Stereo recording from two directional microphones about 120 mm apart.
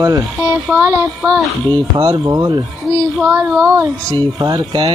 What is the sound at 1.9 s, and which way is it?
Speech, 35° right (ahead or behind).